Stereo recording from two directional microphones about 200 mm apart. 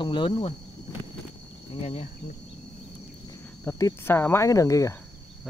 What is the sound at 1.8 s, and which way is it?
Speech, 30° left (ahead or behind).